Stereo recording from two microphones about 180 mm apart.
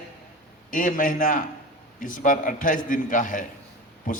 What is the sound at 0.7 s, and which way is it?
A man's voice, 45° left (ahead or behind).